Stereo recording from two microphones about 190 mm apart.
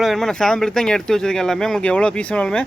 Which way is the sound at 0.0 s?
Centre (ahead or behind).